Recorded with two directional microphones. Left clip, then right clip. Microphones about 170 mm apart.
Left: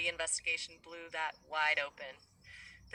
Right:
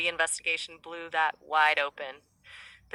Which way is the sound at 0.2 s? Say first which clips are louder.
Right 8 dB; 30° right (ahead or behind).